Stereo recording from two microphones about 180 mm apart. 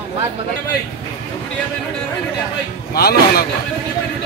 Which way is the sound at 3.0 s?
60° left (ahead or behind).